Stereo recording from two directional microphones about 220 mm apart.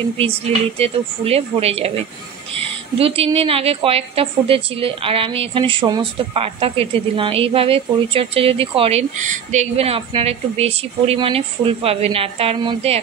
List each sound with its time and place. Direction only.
0.7 s a woman's voice: 25° right (ahead or behind)
3.0 s a woman's voice: 25° right (ahead or behind)